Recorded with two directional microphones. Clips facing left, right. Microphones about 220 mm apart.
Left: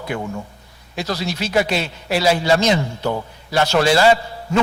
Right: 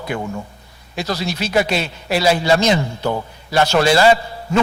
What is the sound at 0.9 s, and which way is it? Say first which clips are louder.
A man's voice: right 1 dB; 10° right (ahead or behind).